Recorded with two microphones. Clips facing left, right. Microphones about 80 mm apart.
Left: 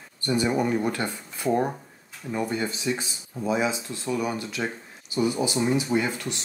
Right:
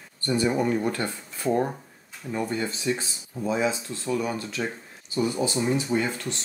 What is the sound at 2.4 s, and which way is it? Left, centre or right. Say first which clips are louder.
Speech: right 1 dB; centre.